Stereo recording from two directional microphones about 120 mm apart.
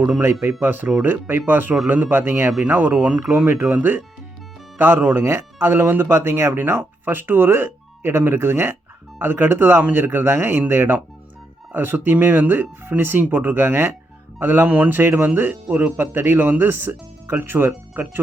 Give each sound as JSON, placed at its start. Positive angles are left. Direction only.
{"t": 0.6, "sound": "speech", "side_deg": -15}